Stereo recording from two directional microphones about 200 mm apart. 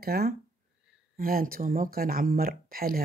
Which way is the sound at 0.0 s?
50° right (ahead or behind).